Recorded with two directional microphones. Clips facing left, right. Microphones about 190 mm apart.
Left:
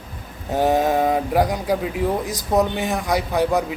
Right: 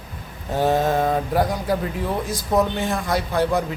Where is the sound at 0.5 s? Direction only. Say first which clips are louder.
Left 1 dB; 15° left (ahead or behind).